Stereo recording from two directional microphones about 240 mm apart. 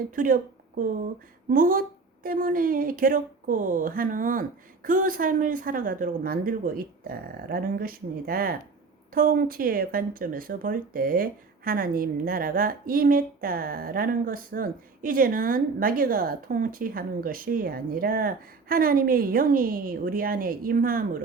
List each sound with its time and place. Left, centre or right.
0.2 s speech: right
1.5 s speech: right